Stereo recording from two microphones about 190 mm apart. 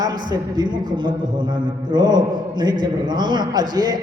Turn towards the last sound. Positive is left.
turn(degrees=-20)  # may be behind; listen again after turning